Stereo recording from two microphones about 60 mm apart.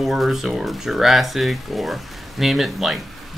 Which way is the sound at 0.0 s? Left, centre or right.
Centre.